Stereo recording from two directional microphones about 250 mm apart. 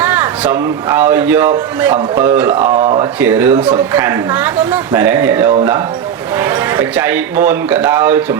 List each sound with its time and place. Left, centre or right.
0.0 s a man's voice: centre
2.7 s speech: right
3.0 s a man's voice: centre